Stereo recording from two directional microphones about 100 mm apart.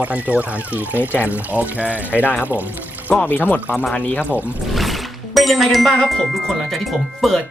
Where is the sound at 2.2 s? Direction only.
20° left (ahead or behind).